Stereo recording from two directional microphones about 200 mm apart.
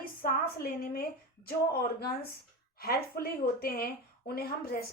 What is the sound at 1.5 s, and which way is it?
A woman's voice, 50° left (ahead or behind).